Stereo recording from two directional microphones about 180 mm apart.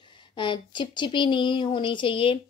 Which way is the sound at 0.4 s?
25° left (ahead or behind).